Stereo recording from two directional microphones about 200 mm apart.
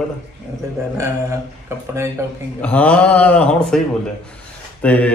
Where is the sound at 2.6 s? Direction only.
5° left (ahead or behind).